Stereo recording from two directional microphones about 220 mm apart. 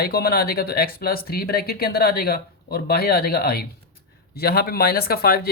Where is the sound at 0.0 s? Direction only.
45° left (ahead or behind).